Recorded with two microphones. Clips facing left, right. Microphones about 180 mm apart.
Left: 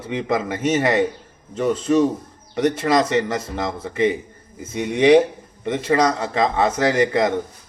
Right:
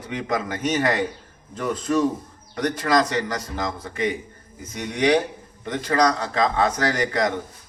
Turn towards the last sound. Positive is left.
turn(degrees=25)  # may be behind; listen again after turning